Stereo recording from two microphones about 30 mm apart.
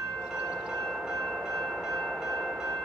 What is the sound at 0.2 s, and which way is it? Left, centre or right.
Train, right.